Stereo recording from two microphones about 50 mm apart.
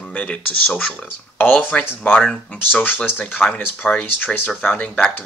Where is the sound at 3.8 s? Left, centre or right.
Centre.